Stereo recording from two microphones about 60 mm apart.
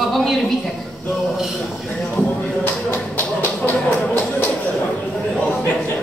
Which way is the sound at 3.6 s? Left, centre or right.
Left.